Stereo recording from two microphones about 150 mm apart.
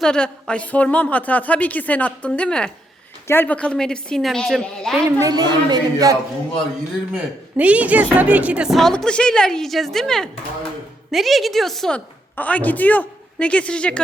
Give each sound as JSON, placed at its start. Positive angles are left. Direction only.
{"t": 0.0, "sound": "a woman's voice", "side_deg": 5}
{"t": 5.2, "sound": "a woman's voice", "side_deg": -25}
{"t": 7.1, "sound": "a woman's voice", "side_deg": -10}